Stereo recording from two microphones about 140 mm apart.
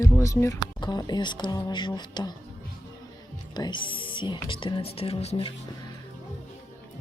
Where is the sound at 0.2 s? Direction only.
20° left (ahead or behind).